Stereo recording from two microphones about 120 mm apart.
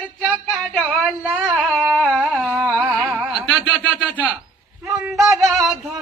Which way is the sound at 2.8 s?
10° right (ahead or behind).